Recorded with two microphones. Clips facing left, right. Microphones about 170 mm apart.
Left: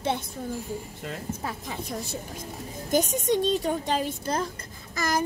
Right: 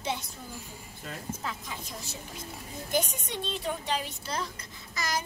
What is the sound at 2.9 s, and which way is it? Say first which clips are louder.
A woman's voice: left 8 dB; 45° left (ahead or behind).